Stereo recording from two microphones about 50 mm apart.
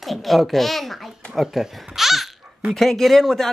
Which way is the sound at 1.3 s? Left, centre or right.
Centre.